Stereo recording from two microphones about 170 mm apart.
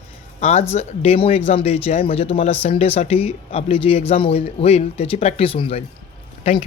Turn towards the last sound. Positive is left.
turn(degrees=35)  # may be behind; listen again after turning